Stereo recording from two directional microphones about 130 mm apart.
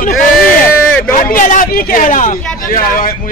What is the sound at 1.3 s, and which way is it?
A man's voice, 85° left.